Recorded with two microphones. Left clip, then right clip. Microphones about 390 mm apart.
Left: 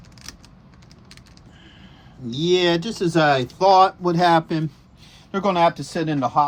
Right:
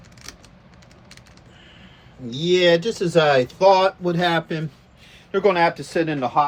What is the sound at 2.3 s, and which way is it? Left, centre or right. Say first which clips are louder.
Speech: right 2 dB; centre.